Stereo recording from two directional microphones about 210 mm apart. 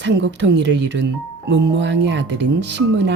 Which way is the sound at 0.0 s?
60° right (ahead or behind).